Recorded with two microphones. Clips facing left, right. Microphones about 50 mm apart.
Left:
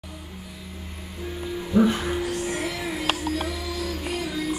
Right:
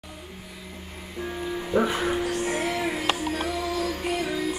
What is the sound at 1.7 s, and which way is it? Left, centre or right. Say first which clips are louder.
Speech: left 4 dB; right.